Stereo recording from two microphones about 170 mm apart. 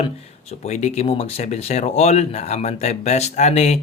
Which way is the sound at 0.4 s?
40° left (ahead or behind).